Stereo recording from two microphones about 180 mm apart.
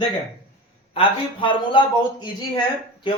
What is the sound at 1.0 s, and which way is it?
Speech, 25° left (ahead or behind).